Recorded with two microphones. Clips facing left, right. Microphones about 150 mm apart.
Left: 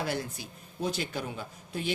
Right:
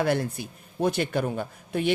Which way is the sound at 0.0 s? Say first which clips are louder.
Right 8 dB; 60° right (ahead or behind).